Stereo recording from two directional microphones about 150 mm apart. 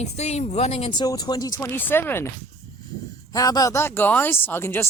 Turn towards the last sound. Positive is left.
turn(degrees=15)  # may be behind; listen again after turning